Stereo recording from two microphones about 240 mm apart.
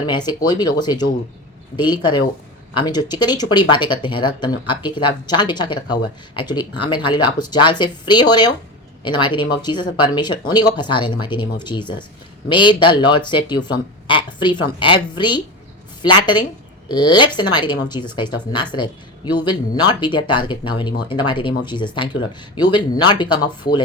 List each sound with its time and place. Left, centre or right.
0.0 s speech: centre